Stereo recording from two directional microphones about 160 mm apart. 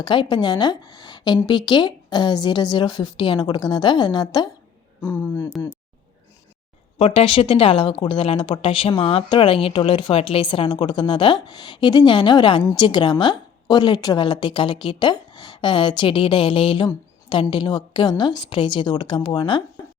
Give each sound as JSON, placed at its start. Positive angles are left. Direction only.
{"t": 0.0, "sound": "a woman's voice", "side_deg": 30}
{"t": 5.0, "sound": "speech", "side_deg": 15}
{"t": 7.0, "sound": "a woman's voice", "side_deg": 35}